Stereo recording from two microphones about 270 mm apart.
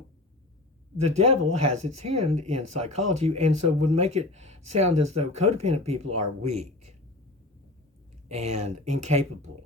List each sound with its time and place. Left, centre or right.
1.2 s speech: right
2.2 s speech: right
2.6 s speech: right
3.9 s speech: right
6.4 s speech: right
8.3 s speech: right
9.5 s speech: right